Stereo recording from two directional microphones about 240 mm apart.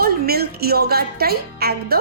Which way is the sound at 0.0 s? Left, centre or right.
Right.